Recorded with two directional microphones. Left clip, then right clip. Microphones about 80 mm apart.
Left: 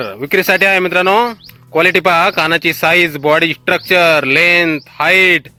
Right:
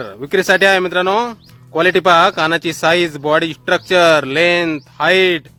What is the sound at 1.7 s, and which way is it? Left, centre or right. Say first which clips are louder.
Speech: left 1 dB; left.